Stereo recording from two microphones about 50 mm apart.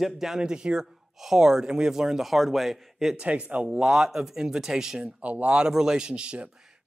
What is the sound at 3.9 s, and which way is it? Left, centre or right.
Speech, centre.